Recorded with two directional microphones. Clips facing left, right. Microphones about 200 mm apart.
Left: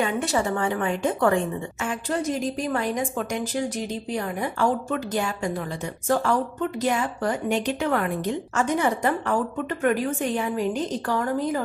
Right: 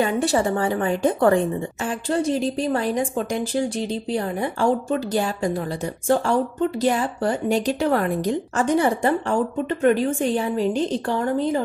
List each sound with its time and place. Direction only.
0.0 s a woman's voice: 35° right (ahead or behind)